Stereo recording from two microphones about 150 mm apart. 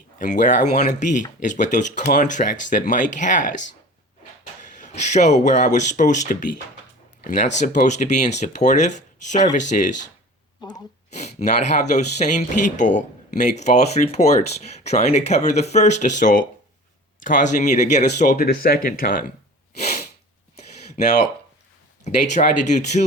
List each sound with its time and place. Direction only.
0.2 s speech: 55° left (ahead or behind)
4.8 s speech: 50° left (ahead or behind)
7.3 s speech: 55° left (ahead or behind)
11.1 s speech: 50° left (ahead or behind)
18.3 s speech: 85° left
22.0 s speech: 50° left (ahead or behind)